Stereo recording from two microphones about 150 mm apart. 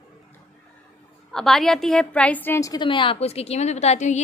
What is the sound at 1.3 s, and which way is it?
A woman's voice, centre (ahead or behind).